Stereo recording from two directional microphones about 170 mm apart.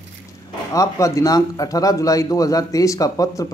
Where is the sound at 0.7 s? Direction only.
20° left (ahead or behind).